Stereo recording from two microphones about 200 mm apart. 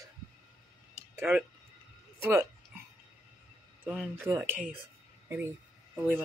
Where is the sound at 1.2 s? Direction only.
10° right (ahead or behind).